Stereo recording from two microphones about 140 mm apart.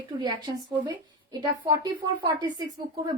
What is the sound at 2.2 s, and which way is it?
Speech, 30° right (ahead or behind).